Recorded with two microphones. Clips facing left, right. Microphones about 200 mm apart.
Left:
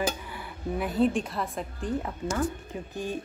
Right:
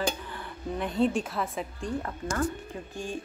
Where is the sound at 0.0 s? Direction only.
10° left (ahead or behind).